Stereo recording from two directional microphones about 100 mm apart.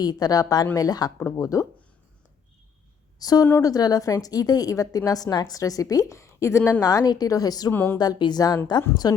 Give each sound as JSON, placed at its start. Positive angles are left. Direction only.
{"t": 0.0, "sound": "a woman's voice", "side_deg": 40}
{"t": 3.2, "sound": "a woman's voice", "side_deg": 40}
{"t": 7.7, "sound": "a woman's voice", "side_deg": 20}
{"t": 7.9, "sound": "a woman's voice", "side_deg": 45}